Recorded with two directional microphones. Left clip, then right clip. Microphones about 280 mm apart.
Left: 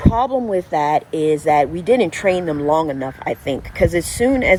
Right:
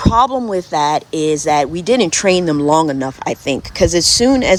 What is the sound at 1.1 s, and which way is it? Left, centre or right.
Speech, centre.